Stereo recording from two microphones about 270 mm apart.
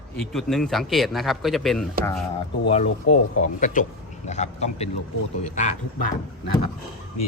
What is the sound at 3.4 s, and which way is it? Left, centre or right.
Speech, left.